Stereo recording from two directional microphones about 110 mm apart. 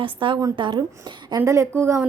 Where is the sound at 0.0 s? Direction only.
50° right (ahead or behind).